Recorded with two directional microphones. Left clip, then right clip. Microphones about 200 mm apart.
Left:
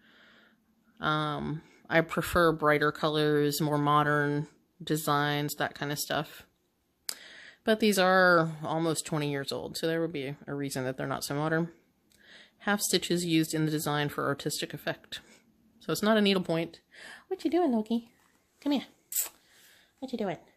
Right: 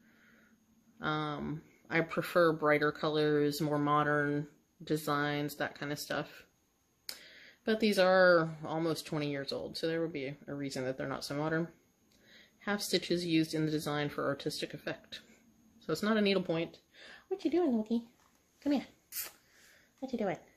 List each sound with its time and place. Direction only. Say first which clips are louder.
0.9 s speech: left 6 dB; 50° left (ahead or behind)